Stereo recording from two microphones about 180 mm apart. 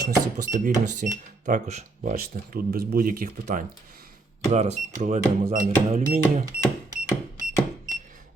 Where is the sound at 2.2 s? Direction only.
55° right (ahead or behind).